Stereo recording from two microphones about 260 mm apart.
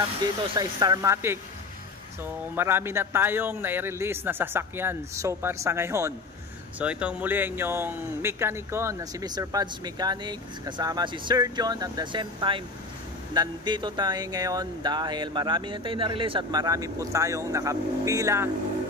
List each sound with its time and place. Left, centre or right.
0.2 s speech: centre
2.5 s speech: centre